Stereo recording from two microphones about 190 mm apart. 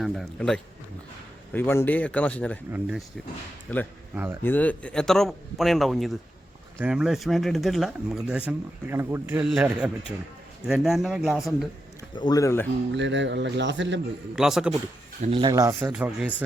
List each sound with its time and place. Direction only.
0.0 s speech: centre (ahead or behind)
3.7 s speech: 10° left (ahead or behind)
4.1 s a man's voice: 10° right (ahead or behind)
4.4 s a man's voice: 10° left (ahead or behind)
12.1 s speech: 20° left (ahead or behind)
12.9 s speech: 70° right (ahead or behind)
14.3 s speech: 5° right (ahead or behind)
15.2 s speech: 25° right (ahead or behind)
15.9 s a man's voice: 5° right (ahead or behind)